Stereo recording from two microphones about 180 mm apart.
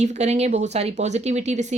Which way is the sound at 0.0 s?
40° right (ahead or behind).